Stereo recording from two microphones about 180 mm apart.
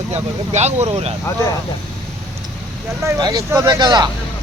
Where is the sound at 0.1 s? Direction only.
40° right (ahead or behind).